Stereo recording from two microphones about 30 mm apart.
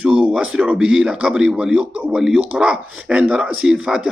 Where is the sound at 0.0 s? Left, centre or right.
Right.